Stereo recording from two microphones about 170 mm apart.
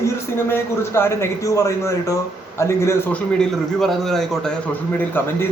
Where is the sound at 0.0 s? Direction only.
15° left (ahead or behind).